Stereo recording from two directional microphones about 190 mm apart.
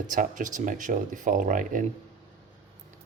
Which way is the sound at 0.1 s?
45° right (ahead or behind).